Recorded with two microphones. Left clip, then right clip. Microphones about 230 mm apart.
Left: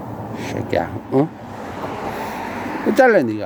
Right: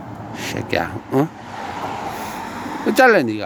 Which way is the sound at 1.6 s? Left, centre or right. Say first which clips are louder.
Right 1 dB; right.